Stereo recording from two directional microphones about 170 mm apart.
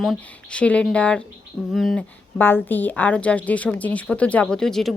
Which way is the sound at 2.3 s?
10° left (ahead or behind).